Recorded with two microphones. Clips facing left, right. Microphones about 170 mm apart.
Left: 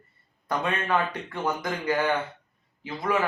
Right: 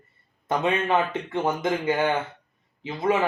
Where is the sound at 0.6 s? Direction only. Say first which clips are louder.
Right 3 dB; 20° right (ahead or behind).